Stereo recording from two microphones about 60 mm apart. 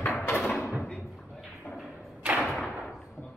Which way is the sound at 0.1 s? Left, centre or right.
Left.